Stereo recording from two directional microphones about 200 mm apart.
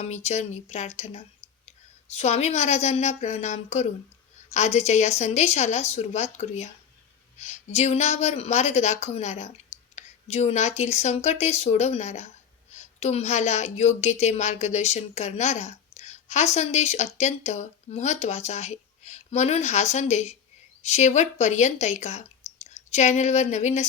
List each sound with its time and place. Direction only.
0.0 s a woman's voice: 35° left (ahead or behind)